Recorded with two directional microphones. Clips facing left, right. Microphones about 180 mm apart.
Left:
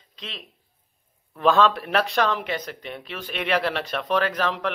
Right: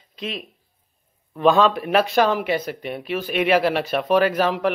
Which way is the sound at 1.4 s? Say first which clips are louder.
Right 3 dB; centre (ahead or behind).